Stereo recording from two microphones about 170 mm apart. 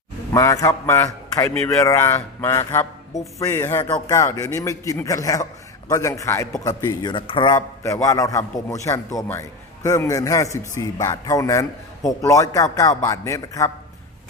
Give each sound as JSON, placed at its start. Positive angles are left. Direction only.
{"t": 0.3, "sound": "a man's voice", "side_deg": 20}